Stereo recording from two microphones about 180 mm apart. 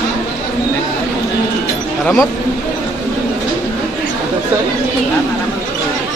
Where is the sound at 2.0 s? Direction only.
5° left (ahead or behind).